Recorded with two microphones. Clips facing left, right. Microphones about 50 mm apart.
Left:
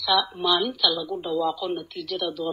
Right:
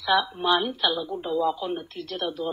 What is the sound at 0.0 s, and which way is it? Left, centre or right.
Speech, right.